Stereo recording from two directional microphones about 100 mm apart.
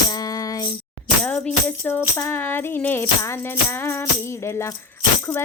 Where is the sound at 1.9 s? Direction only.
25° left (ahead or behind).